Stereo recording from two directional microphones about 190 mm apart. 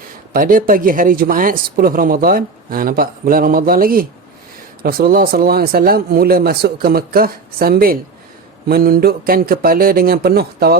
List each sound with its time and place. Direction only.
0.3 s speech: 45° right (ahead or behind)